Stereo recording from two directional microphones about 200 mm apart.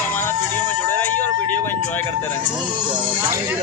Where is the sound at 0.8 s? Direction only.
10° left (ahead or behind).